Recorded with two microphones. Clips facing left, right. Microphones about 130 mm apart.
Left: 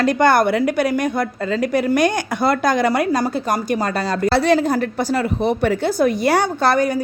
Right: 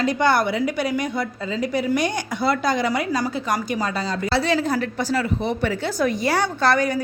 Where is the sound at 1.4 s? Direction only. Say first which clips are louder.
Left 4 dB; 65° left (ahead or behind).